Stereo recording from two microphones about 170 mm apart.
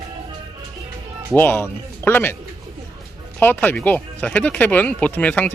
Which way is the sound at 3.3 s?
10° left (ahead or behind).